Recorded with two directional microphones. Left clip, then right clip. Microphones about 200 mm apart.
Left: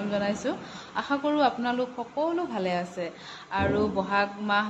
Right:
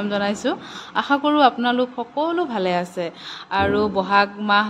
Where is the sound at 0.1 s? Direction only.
60° right (ahead or behind).